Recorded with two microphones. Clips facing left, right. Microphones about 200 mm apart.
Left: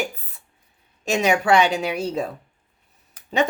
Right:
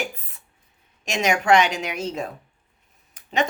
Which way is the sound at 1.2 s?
35° left (ahead or behind).